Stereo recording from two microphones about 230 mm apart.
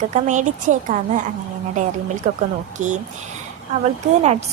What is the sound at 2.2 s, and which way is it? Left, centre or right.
Speech, right.